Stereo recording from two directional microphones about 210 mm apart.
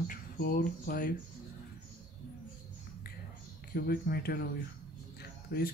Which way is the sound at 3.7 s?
45° left (ahead or behind).